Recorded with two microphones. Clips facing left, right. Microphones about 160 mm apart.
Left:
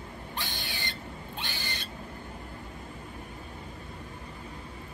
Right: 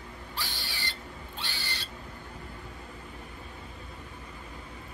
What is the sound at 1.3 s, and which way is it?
Owl, 15° left (ahead or behind).